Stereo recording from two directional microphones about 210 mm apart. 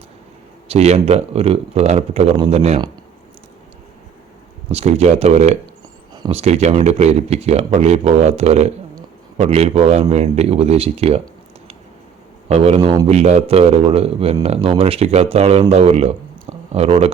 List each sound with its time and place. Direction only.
0.7 s a man's voice: 30° right (ahead or behind)
4.7 s a man's voice: 30° right (ahead or behind)
12.5 s a man's voice: 30° right (ahead or behind)